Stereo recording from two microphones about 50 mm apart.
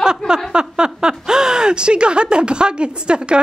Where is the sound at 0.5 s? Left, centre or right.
Centre.